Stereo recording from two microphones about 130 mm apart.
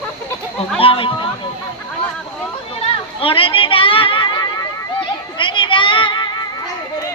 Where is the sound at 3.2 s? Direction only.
45° left (ahead or behind).